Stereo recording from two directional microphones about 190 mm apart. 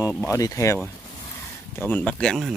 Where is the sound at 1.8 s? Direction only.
10° left (ahead or behind).